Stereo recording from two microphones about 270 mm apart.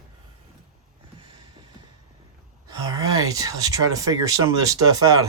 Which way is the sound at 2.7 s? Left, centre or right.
Centre.